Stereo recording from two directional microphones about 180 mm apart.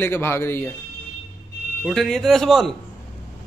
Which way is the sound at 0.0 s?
10° left (ahead or behind).